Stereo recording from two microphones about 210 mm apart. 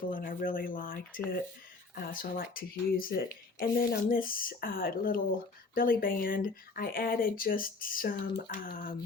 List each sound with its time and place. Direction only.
0.1 s speech: 40° left (ahead or behind)